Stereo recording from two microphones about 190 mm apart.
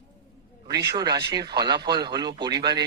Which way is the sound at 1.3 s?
20° right (ahead or behind).